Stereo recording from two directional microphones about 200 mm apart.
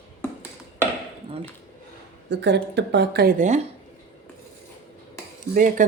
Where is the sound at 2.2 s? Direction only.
60° right (ahead or behind); by 3.6 s 40° right (ahead or behind).